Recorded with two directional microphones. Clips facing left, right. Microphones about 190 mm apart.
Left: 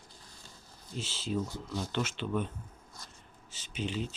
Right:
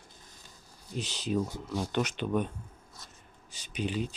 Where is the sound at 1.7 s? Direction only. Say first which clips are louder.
Right 4 dB; 45° right (ahead or behind).